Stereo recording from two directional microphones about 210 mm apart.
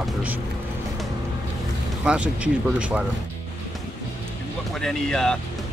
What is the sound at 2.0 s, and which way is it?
Speech, 5° right (ahead or behind).